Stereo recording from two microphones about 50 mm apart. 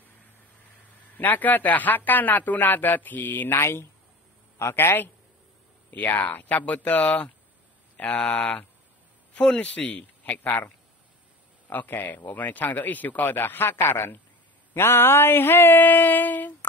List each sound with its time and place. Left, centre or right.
1.1 s a man's voice: left
3.5 s a man's voice: left
5.9 s a man's voice: left
10.3 s a man's voice: left
11.7 s a man's voice: left
14.7 s a sound: left